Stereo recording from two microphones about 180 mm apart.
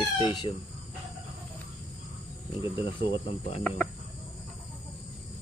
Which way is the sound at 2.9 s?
30° left (ahead or behind).